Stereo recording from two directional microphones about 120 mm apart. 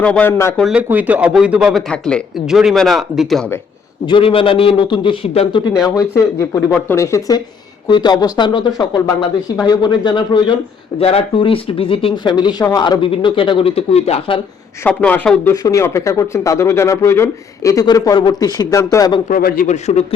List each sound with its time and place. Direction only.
0.0 s a man's voice: 10° left (ahead or behind)
0.7 s speech: 15° right (ahead or behind)
1.9 s a man's voice: 10° left (ahead or behind)
2.5 s a man's voice: 5° right (ahead or behind)
4.0 s speech: 45° left (ahead or behind)
5.8 s speech: 30° left (ahead or behind)
11.0 s speech: 50° left (ahead or behind)
12.1 s speech: 40° left (ahead or behind); by 14.3 s 55° left (ahead or behind)
14.8 s a man's voice: 10° left (ahead or behind)
15.5 s speech: 30° left (ahead or behind)
19.6 s a man's voice: 70° left (ahead or behind)